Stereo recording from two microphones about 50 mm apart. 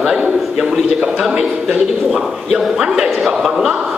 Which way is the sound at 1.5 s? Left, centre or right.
Centre.